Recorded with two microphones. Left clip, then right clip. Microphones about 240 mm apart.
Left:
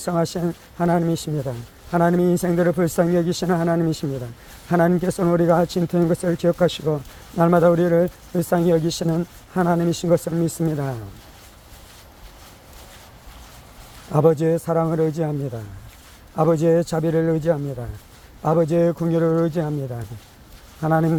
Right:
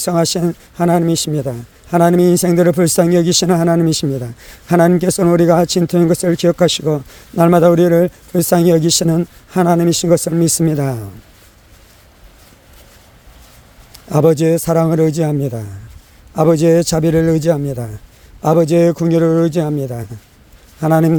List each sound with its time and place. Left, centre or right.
0.0 s speech: right
14.1 s speech: right